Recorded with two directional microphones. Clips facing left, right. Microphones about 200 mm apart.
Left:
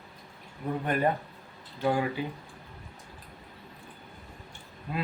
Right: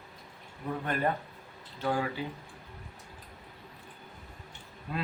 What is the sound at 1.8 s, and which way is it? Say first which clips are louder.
Speech: left 4 dB; 15° left (ahead or behind).